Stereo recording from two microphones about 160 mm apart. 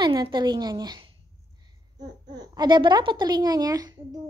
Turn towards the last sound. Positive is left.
turn(degrees=-25)  # may be behind; listen again after turning